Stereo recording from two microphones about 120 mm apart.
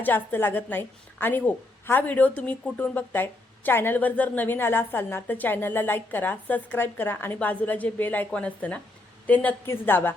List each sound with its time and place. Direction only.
0.0 s speech: 15° left (ahead or behind)